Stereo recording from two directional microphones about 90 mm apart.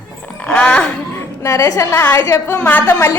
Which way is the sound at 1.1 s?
35° left (ahead or behind).